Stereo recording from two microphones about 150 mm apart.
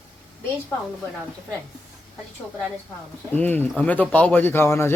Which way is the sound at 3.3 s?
15° left (ahead or behind).